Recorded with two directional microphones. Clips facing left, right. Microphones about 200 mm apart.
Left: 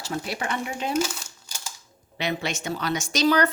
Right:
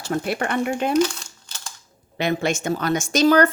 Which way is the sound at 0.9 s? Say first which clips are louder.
Right 6 dB; 10° left (ahead or behind).